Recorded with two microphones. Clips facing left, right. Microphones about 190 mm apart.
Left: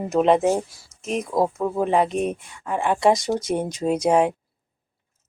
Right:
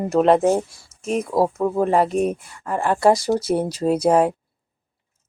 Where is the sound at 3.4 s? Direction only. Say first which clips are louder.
Right 3 dB; 35° right (ahead or behind).